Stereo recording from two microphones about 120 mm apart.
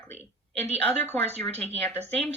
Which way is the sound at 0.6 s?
60° right (ahead or behind).